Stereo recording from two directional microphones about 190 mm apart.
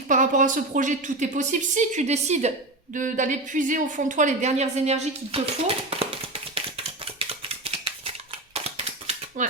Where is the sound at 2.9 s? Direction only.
45° right (ahead or behind).